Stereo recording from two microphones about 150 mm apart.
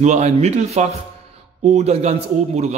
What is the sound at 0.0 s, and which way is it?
A man's voice, 50° right (ahead or behind).